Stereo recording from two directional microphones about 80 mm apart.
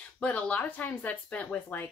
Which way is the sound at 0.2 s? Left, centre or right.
Centre.